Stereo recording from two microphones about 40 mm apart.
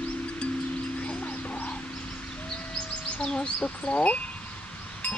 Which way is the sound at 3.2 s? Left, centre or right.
Left.